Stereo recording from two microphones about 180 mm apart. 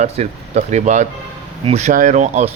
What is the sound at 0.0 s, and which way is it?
Speech, 40° right (ahead or behind).